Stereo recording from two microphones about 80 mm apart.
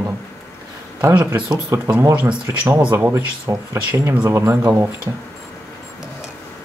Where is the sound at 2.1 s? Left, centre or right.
Right.